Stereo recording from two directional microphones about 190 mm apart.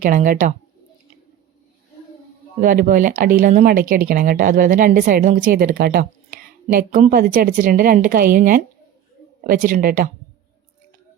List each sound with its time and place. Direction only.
0.0 s speech: 45° right (ahead or behind)
2.6 s speech: 45° right (ahead or behind)